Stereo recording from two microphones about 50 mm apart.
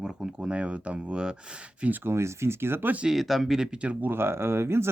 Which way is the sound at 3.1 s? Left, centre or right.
Centre.